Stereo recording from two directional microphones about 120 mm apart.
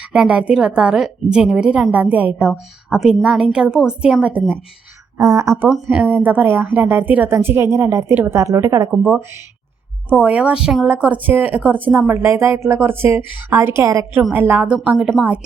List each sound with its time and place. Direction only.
0.1 s a woman's voice: 10° right (ahead or behind)
5.1 s speech: 25° right (ahead or behind)
5.6 s a woman's voice: 10° right (ahead or behind)
10.1 s a woman's voice: 10° right (ahead or behind)
14.2 s a woman's voice: 15° right (ahead or behind)
14.8 s speech: 5° right (ahead or behind)